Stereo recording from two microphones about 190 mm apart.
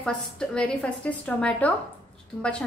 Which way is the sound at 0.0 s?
5° left (ahead or behind).